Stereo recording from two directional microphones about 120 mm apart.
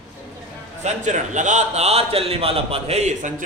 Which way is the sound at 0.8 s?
90° right.